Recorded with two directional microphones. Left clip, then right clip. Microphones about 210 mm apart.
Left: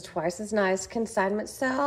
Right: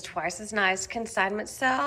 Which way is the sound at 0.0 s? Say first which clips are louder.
Left 1 dB; 15° left (ahead or behind).